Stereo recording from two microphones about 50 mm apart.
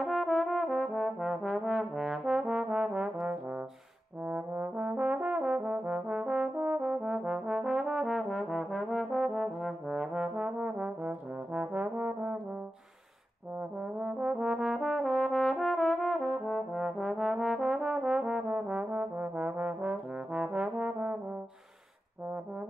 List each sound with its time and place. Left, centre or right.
0.0 s trombone: centre; by 12.4 s right
13.6 s brass instrument: right